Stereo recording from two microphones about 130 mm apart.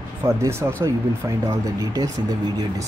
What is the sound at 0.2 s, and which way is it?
Speech, 20° right (ahead or behind).